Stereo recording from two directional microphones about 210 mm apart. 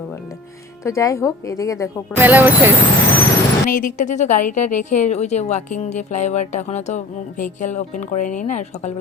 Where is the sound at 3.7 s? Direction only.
40° left (ahead or behind).